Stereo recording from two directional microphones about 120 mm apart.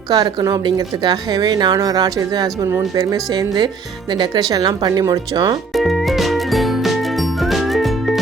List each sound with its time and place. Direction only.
0.1 s speech: 35° right (ahead or behind)
5.7 s music: centre (ahead or behind)